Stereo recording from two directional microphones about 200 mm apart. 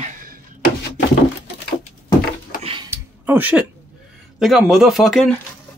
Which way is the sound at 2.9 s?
10° right (ahead or behind).